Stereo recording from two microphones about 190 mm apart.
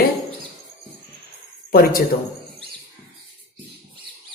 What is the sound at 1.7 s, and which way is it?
Speech, 50° left (ahead or behind).